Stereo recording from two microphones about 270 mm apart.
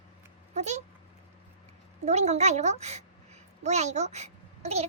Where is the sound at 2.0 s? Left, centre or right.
Right.